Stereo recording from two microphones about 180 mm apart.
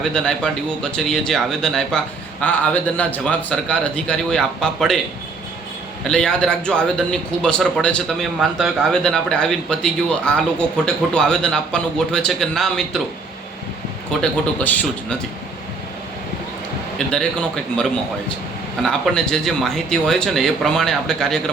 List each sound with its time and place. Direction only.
0.0 s a man's voice: 5° left (ahead or behind)
6.1 s a man's voice: 5° left (ahead or behind)
14.2 s speech: 10° left (ahead or behind)
18.8 s a man's voice: 5° left (ahead or behind)